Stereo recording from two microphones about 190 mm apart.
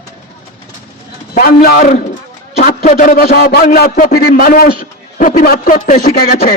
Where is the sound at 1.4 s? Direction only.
50° left (ahead or behind).